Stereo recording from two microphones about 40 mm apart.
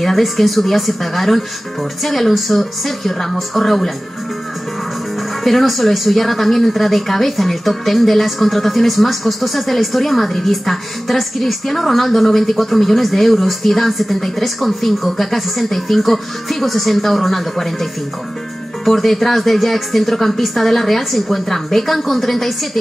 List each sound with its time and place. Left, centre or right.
0.0 s speech: centre
5.4 s speech: centre
18.9 s speech: centre